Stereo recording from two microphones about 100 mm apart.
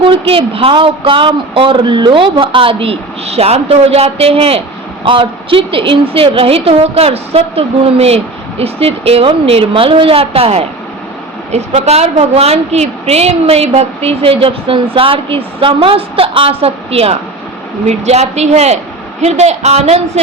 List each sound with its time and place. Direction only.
0.0 s speech: 65° right (ahead or behind)
5.0 s a woman's voice: 60° right (ahead or behind); by 10.7 s 75° right (ahead or behind)
11.5 s a woman's voice: 90° right